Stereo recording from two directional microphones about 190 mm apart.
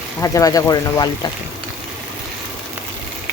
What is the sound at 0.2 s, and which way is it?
Speech, 15° left (ahead or behind).